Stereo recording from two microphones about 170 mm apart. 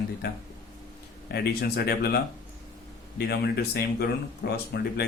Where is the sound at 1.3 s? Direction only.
70° left (ahead or behind).